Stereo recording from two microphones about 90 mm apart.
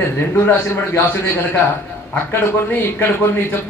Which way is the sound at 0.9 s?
20° left (ahead or behind).